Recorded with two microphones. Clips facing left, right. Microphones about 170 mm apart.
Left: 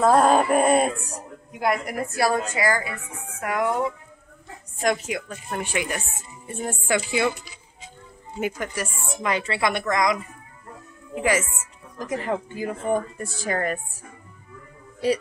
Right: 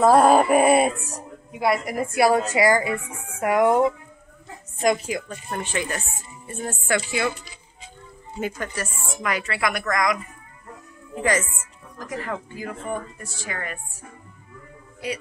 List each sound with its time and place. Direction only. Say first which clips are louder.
0.0 s a sound: right 2 dB; 10° right (ahead or behind)
1.5 s a woman's voice: right 2 dB; 5° right (ahead or behind)
2.1 s speech: right 5 dB; 20° right (ahead or behind)
4.7 s a woman's voice: right 2 dB; centre (ahead or behind); by 7.3 s 15° left (ahead or behind)
8.4 s speech: left 1 dB; 15° left (ahead or behind)
9.1 s a woman's voice: left 2 dB; 25° left (ahead or behind)
12.0 s a woman's voice: left 4 dB; 20° left (ahead or behind)
12.9 s speech: left 6 dB; 40° left (ahead or behind)